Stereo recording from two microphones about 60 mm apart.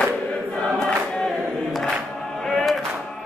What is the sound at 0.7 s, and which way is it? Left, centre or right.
Choir, centre.